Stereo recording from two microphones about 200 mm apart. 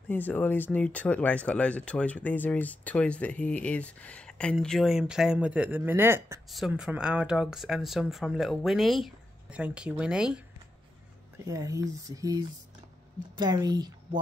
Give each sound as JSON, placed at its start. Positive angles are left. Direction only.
{"t": 0.1, "sound": "speech", "side_deg": 10}
{"t": 6.5, "sound": "speech", "side_deg": 0}
{"t": 11.3, "sound": "speech", "side_deg": -15}